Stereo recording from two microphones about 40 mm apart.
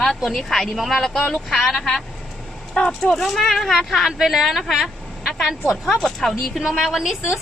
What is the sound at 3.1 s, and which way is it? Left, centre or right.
Speech, centre.